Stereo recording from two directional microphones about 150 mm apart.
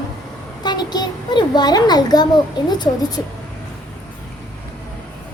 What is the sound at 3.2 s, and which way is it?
Speech, 15° left (ahead or behind).